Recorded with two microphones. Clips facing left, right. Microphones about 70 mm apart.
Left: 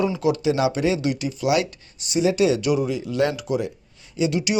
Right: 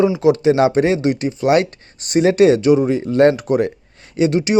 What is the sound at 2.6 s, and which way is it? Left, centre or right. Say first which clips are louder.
Speech: right 8 dB; right.